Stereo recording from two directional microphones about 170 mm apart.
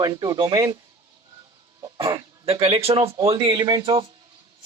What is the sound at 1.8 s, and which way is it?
Cough, 20° right (ahead or behind).